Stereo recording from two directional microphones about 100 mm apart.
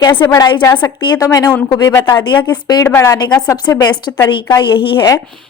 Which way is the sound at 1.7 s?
45° left (ahead or behind).